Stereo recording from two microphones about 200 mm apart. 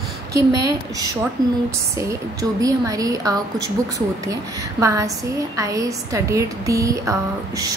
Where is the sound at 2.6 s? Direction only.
15° right (ahead or behind).